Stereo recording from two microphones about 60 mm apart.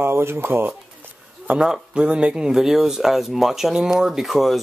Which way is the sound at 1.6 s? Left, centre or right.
Centre.